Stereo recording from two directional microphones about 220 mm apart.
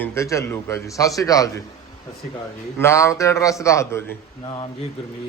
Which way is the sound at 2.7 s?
10° left (ahead or behind).